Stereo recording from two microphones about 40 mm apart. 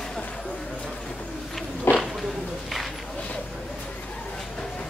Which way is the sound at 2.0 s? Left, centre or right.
Centre.